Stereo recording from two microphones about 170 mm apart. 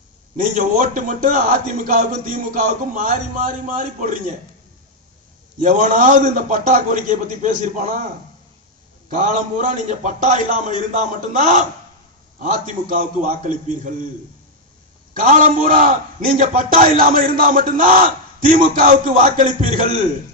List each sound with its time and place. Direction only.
0.5 s a man's voice: 50° right (ahead or behind)
5.6 s a man's voice: 45° right (ahead or behind)
9.0 s a man's voice: 45° right (ahead or behind)
15.2 s a man's voice: 50° right (ahead or behind)